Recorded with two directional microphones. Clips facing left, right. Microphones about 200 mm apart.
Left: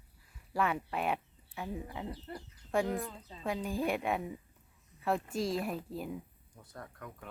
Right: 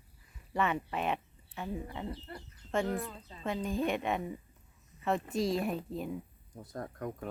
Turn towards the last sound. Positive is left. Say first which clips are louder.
# right 9 dB
turn(degrees=-40)  # may be behind; listen again after turning